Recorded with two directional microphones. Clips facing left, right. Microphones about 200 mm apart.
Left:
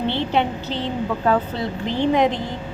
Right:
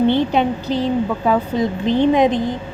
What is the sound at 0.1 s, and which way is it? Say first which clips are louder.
A woman's voice: right 5 dB; 15° right (ahead or behind).